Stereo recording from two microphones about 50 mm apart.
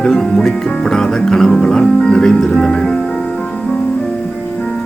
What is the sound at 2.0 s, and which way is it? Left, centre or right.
Music, centre.